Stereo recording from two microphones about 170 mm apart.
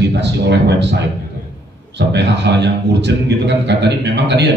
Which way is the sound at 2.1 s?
85° right.